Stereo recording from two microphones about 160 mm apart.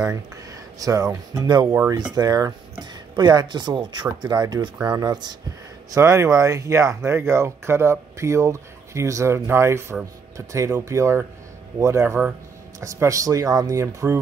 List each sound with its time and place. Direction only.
0.0 s speech: 20° right (ahead or behind)